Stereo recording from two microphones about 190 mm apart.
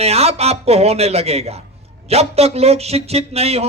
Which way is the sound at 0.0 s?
35° right (ahead or behind).